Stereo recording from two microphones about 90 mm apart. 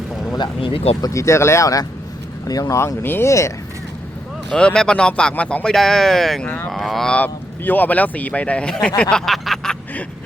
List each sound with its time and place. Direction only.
0.3 s speech: 65° left (ahead or behind)
1.1 s speech: 35° left (ahead or behind)
4.4 s speech: 10° left (ahead or behind)
6.4 s speech: 20° left (ahead or behind)
6.7 s a sound: centre (ahead or behind)
7.2 s speech: 20° left (ahead or behind)
9.0 s a sound: 10° left (ahead or behind)